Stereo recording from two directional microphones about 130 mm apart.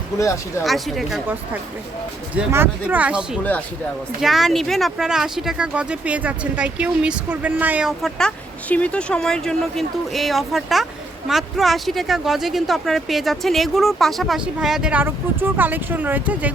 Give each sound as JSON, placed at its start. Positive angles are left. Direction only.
{"t": 0.2, "sound": "speech", "side_deg": 25}
{"t": 0.6, "sound": "speech", "side_deg": 0}
{"t": 2.5, "sound": "speech", "side_deg": -15}
{"t": 8.7, "sound": "speech", "side_deg": 10}